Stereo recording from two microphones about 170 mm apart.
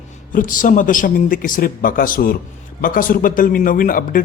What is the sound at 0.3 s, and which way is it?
A man's voice, 50° left (ahead or behind).